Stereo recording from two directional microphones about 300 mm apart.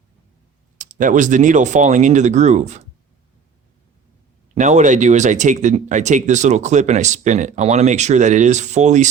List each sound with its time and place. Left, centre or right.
0.8 s speech: right
4.5 s speech: right